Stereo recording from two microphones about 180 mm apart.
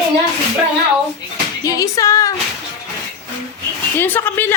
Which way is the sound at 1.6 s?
20° left (ahead or behind).